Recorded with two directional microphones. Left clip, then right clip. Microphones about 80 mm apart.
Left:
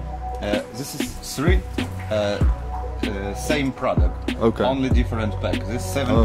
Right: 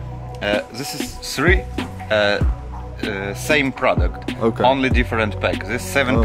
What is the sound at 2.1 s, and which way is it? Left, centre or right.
Speech, centre.